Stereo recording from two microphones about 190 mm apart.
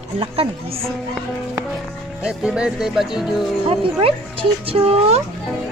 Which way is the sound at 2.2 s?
5° right (ahead or behind).